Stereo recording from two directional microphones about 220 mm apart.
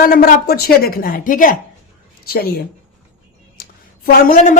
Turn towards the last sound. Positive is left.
turn(degrees=40)  # may be behind; listen again after turning